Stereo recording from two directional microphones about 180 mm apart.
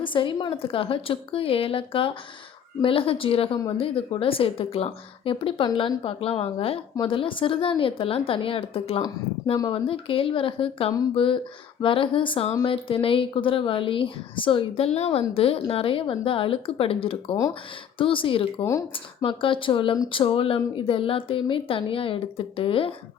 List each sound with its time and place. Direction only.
0.0 s a woman's voice: 25° left (ahead or behind)
18.6 s speech: 15° left (ahead or behind)
19.2 s a woman's voice: 30° left (ahead or behind)